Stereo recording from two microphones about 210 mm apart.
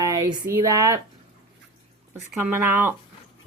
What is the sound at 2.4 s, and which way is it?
Speech, 10° right (ahead or behind).